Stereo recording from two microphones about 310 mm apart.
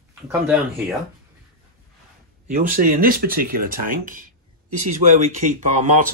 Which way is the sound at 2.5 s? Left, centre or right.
Right.